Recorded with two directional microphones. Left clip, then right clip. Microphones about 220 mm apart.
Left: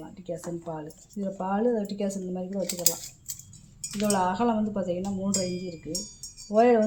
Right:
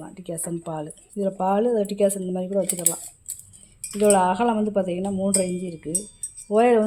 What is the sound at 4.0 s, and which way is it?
Speech, 50° right (ahead or behind).